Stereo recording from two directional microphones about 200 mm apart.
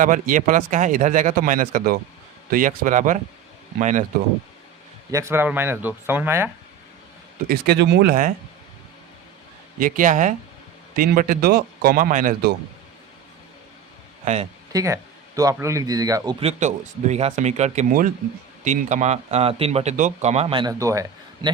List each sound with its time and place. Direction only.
0.0 s a man's voice: 40° right (ahead or behind)
5.1 s speech: 10° right (ahead or behind)
7.4 s speech: 50° right (ahead or behind)
9.7 s a man's voice: 45° right (ahead or behind)
14.3 s a man's voice: 40° right (ahead or behind)
14.7 s speech: 15° right (ahead or behind)
16.4 s a man's voice: 35° right (ahead or behind); by 21.5 s 15° right (ahead or behind)